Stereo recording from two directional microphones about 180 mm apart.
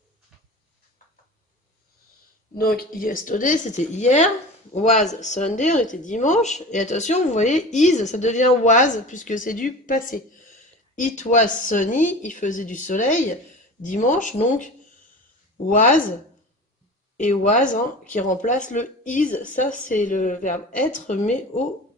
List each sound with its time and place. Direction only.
2.5 s speech: 55° left (ahead or behind)
17.2 s speech: 45° left (ahead or behind)